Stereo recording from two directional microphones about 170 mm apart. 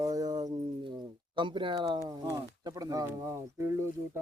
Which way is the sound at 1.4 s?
30° right (ahead or behind).